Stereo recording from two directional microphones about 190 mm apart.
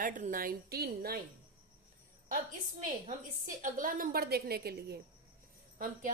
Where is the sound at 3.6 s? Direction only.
45° right (ahead or behind).